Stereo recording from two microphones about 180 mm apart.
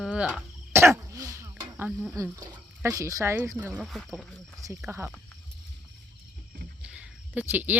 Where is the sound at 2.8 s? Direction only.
15° right (ahead or behind).